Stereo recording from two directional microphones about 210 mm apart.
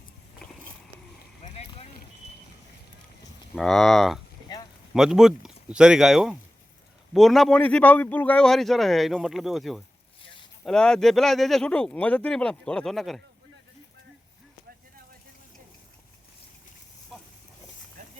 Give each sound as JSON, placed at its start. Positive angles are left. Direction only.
{"t": 3.5, "sound": "a man's voice", "side_deg": 0}
{"t": 4.5, "sound": "a sound", "side_deg": 20}
{"t": 4.9, "sound": "a man's voice", "side_deg": 0}